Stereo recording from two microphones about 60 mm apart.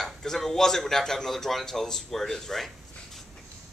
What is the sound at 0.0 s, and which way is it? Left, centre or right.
Speech, centre.